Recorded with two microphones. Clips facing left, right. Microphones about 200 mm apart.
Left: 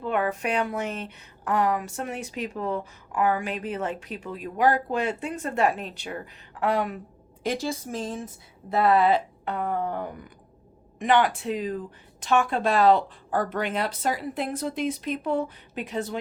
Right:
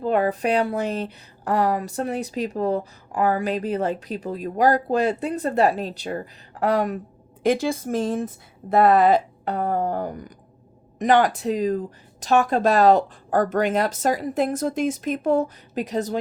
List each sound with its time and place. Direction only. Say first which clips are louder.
0.0 s a woman's voice: right 5 dB; 35° right (ahead or behind)
7.4 s speech: right 7 dB; 55° right (ahead or behind)
8.7 s a woman's voice: right 4 dB; 45° right (ahead or behind)